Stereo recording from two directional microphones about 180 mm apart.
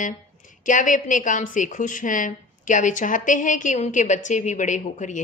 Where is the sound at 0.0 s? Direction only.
45° left (ahead or behind).